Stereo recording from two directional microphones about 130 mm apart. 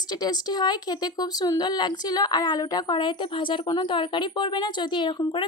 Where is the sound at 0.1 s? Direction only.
30° left (ahead or behind).